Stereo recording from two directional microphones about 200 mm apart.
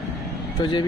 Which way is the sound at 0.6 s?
20° left (ahead or behind).